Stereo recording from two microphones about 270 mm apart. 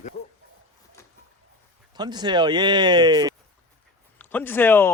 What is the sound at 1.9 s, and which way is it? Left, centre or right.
Speech, centre.